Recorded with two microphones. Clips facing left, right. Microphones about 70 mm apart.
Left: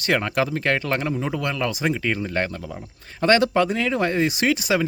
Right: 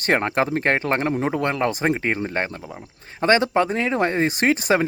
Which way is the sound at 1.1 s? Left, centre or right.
Right.